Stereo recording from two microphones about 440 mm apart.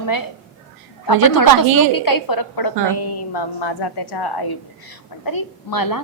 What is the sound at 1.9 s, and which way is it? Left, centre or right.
A woman's voice, left.